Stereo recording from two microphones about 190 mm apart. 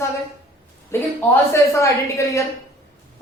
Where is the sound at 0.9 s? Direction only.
15° left (ahead or behind).